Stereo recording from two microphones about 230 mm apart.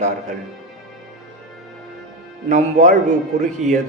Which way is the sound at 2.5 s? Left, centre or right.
Right.